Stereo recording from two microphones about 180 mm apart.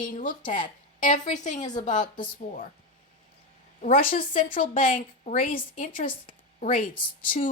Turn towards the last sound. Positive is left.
turn(degrees=45)  # may be behind; listen again after turning